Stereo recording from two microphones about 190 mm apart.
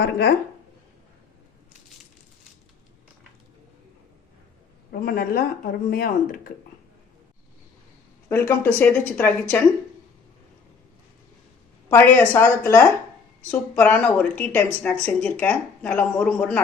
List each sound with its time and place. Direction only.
0.0 s speech: 60° left (ahead or behind)
4.9 s speech: 55° left (ahead or behind)
8.3 s a woman's voice: 10° left (ahead or behind)
11.9 s a woman's voice: 10° left (ahead or behind)